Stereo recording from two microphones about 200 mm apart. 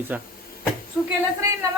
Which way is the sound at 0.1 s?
5° right (ahead or behind).